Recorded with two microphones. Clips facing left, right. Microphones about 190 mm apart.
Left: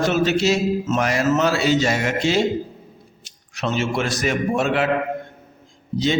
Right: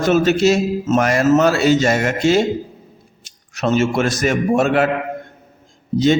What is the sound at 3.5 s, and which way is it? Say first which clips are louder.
A man's voice: right 6 dB; 45° right (ahead or behind).